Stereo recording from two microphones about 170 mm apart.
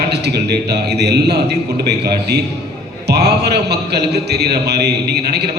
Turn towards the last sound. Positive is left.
turn(degrees=-75)  # may be behind; listen again after turning